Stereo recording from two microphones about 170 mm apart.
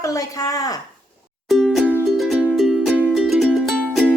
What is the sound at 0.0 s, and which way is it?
Speech, 20° left (ahead or behind).